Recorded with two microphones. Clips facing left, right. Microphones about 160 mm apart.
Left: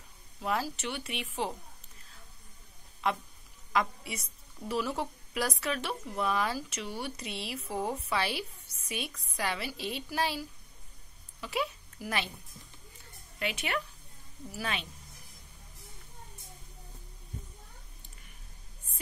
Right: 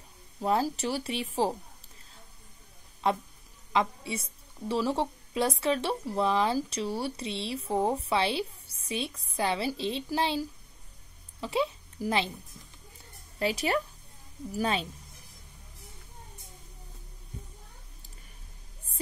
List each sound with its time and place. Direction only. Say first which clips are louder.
0.4 s speech: right 6 dB; 30° right (ahead or behind)
3.0 s a woman's voice: right 4 dB; 30° right (ahead or behind)
11.4 s a woman's voice: right 5 dB; 25° right (ahead or behind)
13.4 s speech: right 6 dB; 35° right (ahead or behind)